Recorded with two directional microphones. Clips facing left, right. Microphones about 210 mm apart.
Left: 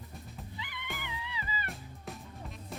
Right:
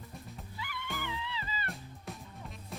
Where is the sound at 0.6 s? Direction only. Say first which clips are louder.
Right 5 dB; 20° left (ahead or behind).